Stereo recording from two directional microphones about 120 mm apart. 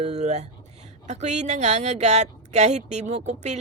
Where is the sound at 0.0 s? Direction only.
65° right (ahead or behind).